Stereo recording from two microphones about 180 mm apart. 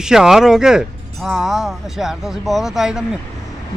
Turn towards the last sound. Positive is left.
turn(degrees=-5)  # may be behind; listen again after turning